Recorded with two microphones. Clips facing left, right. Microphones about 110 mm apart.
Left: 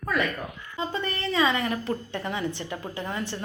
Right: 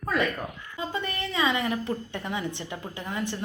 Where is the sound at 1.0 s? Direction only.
15° right (ahead or behind).